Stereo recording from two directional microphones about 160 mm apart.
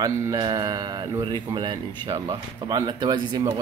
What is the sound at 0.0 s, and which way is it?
Speech, 20° right (ahead or behind).